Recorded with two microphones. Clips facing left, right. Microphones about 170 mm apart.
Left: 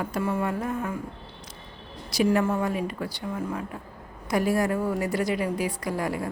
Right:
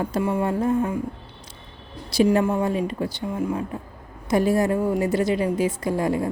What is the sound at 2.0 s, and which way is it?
A woman's voice, 30° right (ahead or behind).